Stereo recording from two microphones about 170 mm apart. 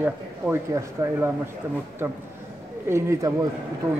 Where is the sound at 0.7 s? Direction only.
20° right (ahead or behind).